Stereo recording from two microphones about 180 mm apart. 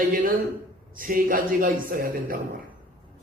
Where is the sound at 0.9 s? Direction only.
50° right (ahead or behind).